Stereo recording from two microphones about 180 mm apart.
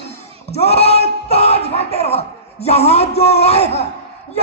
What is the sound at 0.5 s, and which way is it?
Speech, 35° left (ahead or behind).